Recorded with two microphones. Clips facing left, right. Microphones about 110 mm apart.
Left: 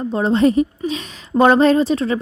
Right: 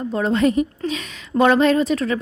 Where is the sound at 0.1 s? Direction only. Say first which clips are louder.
Left 3 dB; 30° left (ahead or behind).